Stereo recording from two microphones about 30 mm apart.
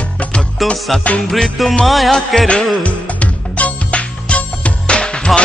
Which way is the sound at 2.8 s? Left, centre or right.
Left.